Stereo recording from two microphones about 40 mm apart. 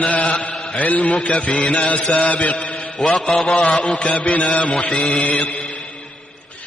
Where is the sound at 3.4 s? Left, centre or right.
Centre.